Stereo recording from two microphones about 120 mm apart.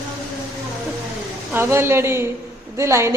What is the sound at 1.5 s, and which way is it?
A woman's voice, 20° right (ahead or behind).